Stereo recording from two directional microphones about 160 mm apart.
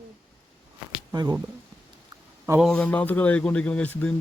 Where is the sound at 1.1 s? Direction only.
25° right (ahead or behind).